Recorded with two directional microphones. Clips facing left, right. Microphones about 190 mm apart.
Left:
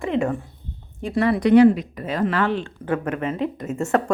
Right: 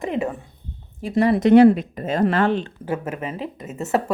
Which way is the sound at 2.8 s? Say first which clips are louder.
Left 5 dB; 5° right (ahead or behind).